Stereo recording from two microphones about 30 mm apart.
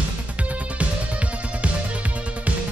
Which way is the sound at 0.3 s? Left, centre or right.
Right.